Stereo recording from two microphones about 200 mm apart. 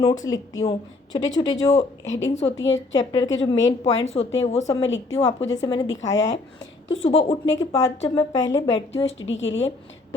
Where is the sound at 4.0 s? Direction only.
30° left (ahead or behind).